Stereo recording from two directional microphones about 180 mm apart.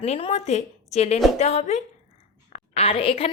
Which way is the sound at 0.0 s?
35° left (ahead or behind).